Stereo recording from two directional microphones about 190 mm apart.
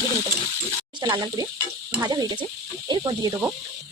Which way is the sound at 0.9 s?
25° right (ahead or behind).